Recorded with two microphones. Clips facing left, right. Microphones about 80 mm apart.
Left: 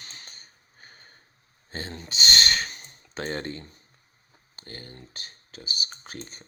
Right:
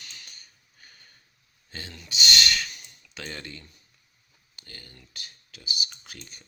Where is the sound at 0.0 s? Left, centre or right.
Left.